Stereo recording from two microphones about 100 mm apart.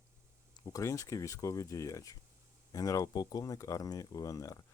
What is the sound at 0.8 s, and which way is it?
Speech, 30° left (ahead or behind).